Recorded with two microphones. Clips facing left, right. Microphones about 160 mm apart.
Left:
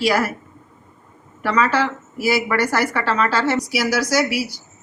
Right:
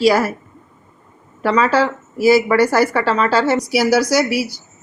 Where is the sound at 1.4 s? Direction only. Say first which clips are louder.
Right 4 dB; 35° right (ahead or behind).